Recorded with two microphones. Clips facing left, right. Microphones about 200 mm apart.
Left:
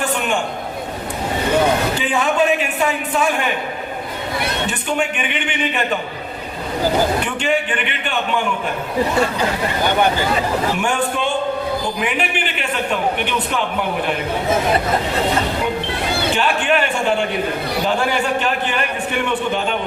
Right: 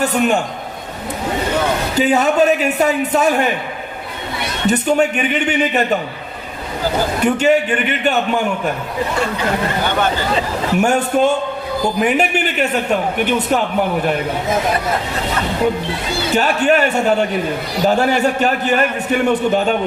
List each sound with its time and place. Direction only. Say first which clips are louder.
0.0 s a man's voice: right 5 dB; 40° right (ahead or behind)
2.0 s a man's voice: right 5 dB; 40° right (ahead or behind)
4.6 s a man's voice: right 11 dB; 40° right (ahead or behind)
7.3 s a man's voice: right 6 dB; 40° right (ahead or behind)
10.8 s a man's voice: right 6 dB; 40° right (ahead or behind)
16.3 s a man's voice: right 6 dB; 40° right (ahead or behind)